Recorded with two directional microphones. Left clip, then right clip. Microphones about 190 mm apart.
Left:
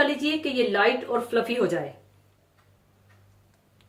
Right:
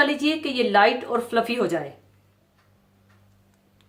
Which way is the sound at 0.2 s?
50° right (ahead or behind).